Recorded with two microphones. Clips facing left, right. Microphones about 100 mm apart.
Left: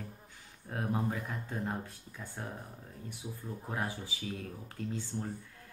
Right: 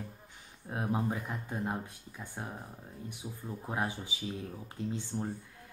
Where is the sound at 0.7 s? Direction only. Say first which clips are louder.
Right 1 dB; 20° right (ahead or behind).